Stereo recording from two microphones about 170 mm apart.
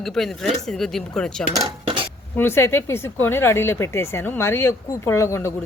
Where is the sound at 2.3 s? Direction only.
15° left (ahead or behind).